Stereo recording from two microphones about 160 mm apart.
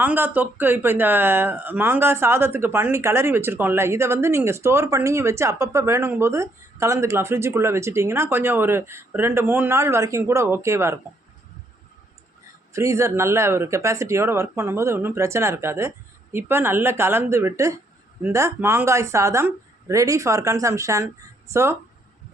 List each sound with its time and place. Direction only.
0.0 s speech: 10° right (ahead or behind)
12.7 s speech: 20° right (ahead or behind)